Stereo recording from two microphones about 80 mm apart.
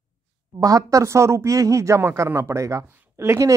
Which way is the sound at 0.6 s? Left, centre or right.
Right.